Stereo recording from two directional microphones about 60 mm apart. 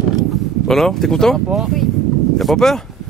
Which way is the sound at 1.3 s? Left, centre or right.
Centre.